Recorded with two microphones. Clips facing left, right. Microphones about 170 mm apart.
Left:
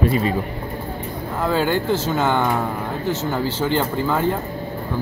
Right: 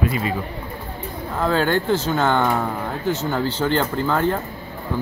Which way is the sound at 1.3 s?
5° left (ahead or behind).